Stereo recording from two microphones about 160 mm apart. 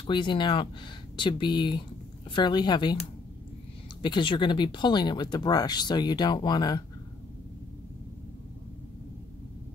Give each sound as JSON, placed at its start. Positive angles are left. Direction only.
{"t": 0.0, "sound": "speech", "side_deg": 30}
{"t": 4.0, "sound": "speech", "side_deg": 30}